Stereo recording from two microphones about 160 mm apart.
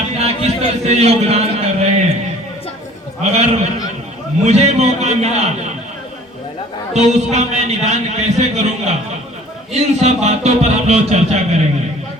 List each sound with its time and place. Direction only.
0.2 s a man's voice: 40° right (ahead or behind)
3.3 s a man's voice: 40° right (ahead or behind)
6.9 s a man's voice: 45° right (ahead or behind)